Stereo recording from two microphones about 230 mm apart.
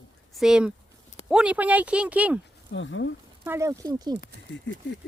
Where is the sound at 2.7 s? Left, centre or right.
Left.